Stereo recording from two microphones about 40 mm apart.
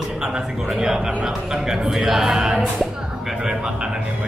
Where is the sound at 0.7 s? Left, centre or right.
Centre.